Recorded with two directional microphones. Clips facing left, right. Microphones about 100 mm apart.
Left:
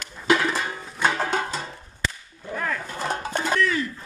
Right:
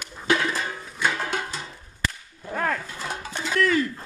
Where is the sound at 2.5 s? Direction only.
50° right (ahead or behind).